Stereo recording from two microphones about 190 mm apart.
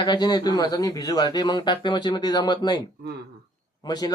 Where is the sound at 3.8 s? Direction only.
20° left (ahead or behind).